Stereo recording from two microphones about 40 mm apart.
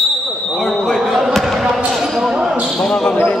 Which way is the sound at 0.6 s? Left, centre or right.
Centre.